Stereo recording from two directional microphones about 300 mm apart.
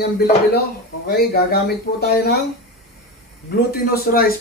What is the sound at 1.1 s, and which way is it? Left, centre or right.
Speech, left.